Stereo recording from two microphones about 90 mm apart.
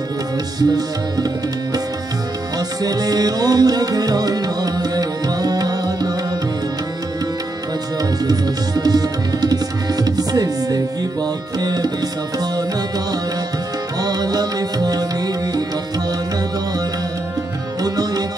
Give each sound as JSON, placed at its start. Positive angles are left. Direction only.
{"t": 0.6, "sound": "music", "side_deg": -45}
{"t": 2.8, "sound": "music", "side_deg": -45}
{"t": 8.0, "sound": "tabla", "side_deg": -45}
{"t": 14.0, "sound": "music", "side_deg": -45}
{"t": 17.8, "sound": "music", "side_deg": -45}